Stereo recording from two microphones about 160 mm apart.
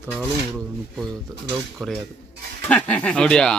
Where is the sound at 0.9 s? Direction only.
Centre (ahead or behind).